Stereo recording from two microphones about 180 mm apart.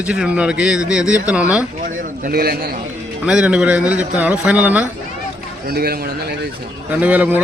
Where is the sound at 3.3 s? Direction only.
5° right (ahead or behind).